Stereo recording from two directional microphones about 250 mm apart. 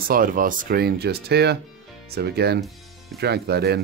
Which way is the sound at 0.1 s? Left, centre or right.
Right.